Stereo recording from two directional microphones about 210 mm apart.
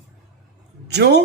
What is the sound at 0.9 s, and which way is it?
Speech, 55° right (ahead or behind).